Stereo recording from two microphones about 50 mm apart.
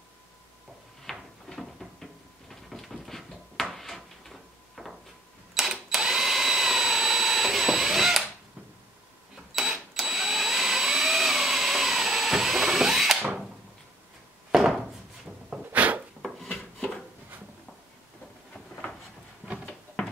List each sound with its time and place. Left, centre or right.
1.0 s a sound: centre
9.6 s vacuum cleaner: centre
14.5 s wood: centre
15.5 s sneeze: right